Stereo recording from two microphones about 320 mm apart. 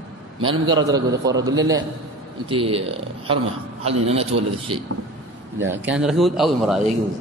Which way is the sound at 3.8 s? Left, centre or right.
Centre.